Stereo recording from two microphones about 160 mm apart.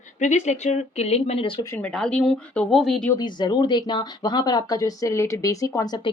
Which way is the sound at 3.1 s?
25° left (ahead or behind).